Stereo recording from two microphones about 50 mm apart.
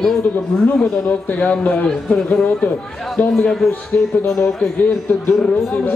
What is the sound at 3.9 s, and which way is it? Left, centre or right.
Speech, left.